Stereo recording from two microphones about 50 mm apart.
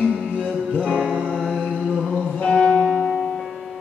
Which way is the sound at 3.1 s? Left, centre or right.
Centre.